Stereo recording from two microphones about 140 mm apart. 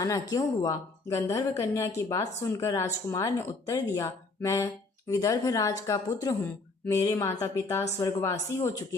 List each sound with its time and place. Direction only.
0.0 s speech: 25° left (ahead or behind)
6.4 s speech: 15° left (ahead or behind)